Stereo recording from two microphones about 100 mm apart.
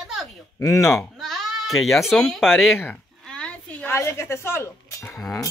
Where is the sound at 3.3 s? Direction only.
10° left (ahead or behind).